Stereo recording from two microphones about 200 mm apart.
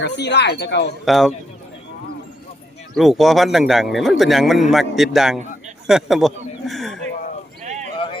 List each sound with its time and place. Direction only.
0.0 s speech: 55° left (ahead or behind)
1.0 s a man's voice: centre (ahead or behind)
2.9 s a man's voice: centre (ahead or behind)
7.6 s clip-clop: 35° right (ahead or behind)
7.9 s a sound: 25° left (ahead or behind)